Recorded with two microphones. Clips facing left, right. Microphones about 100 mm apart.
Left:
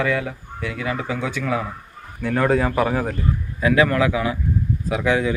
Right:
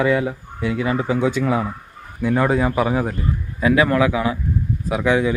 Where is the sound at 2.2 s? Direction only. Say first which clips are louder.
Right 1 dB; 10° right (ahead or behind).